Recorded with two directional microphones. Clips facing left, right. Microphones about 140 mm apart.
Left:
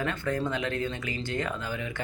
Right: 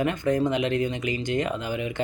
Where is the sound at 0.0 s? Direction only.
15° right (ahead or behind).